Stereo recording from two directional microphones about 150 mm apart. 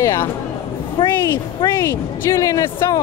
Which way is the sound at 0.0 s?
20° left (ahead or behind).